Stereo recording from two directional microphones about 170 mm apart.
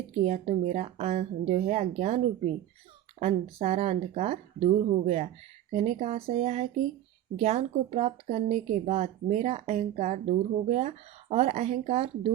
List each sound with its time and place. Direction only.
0.3 s speech: 40° right (ahead or behind)
6.2 s speech: 35° right (ahead or behind)